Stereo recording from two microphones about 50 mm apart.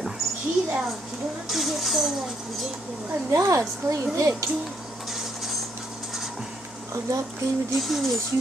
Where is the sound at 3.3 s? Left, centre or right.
Right.